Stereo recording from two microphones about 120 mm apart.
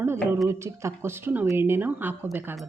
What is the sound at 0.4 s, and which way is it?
Speech, 25° right (ahead or behind).